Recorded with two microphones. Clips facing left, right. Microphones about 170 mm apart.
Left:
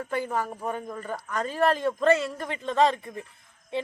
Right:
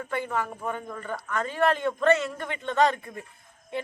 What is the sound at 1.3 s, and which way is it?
A woman's voice, 35° left (ahead or behind).